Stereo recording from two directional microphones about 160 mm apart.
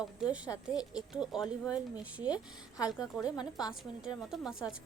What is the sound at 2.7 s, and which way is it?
Speech, 20° left (ahead or behind).